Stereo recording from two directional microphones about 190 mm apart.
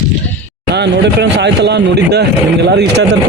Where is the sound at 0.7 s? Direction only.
65° right (ahead or behind).